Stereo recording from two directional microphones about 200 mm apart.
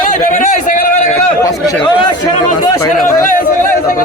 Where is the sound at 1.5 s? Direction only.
20° left (ahead or behind).